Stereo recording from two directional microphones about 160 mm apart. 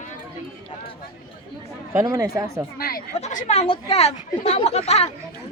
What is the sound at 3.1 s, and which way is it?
Speech, 45° left (ahead or behind).